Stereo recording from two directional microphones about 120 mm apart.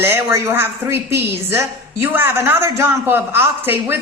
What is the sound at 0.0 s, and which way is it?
A woman's voice, 20° right (ahead or behind).